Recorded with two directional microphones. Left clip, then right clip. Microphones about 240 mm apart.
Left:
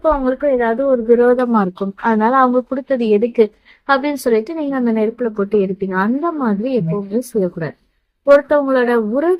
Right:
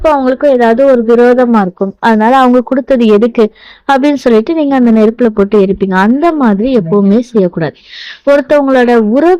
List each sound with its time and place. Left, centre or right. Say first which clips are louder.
0.0 s a woman's voice: right 7 dB; right